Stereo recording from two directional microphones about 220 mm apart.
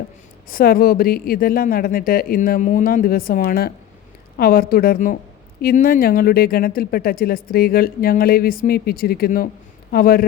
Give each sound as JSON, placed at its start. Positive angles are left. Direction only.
{"t": 0.4, "sound": "a woman's voice", "side_deg": 40}